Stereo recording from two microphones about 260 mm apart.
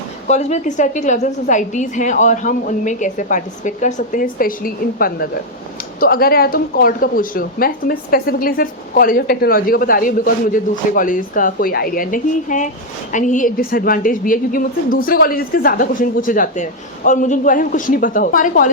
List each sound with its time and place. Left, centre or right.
0.3 s a woman's voice: left